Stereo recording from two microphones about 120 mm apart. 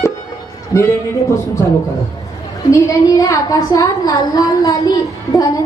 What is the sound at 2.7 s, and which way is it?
A woman's voice, 30° left (ahead or behind).